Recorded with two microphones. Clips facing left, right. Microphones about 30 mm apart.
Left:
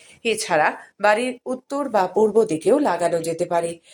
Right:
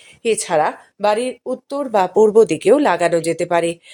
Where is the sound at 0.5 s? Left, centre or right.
Centre.